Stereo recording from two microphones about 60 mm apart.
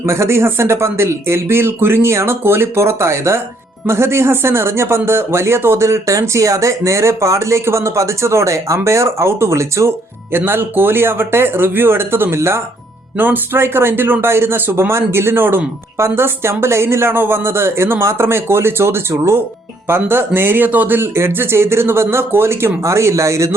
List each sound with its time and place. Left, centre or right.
0.0 s speech: right
10.3 s speech: right
13.1 s speech: right